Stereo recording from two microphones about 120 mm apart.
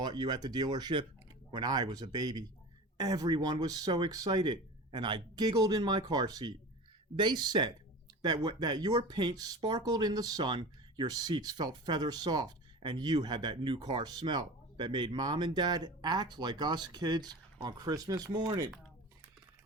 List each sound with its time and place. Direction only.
0.0 s speech: 35° right (ahead or behind)